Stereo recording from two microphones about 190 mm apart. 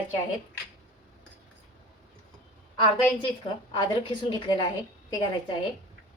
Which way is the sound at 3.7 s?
25° left (ahead or behind).